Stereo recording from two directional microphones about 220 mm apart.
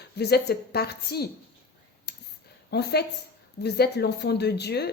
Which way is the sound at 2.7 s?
50° left (ahead or behind).